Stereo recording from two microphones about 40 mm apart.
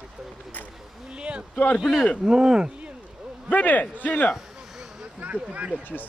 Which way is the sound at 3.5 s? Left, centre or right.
Left.